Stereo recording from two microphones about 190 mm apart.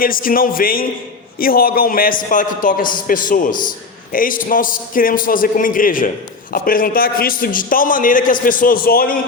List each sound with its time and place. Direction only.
0.0 s a man's voice: 50° left (ahead or behind)